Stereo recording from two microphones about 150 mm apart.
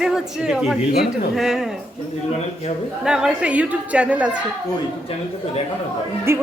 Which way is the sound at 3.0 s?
5° right (ahead or behind).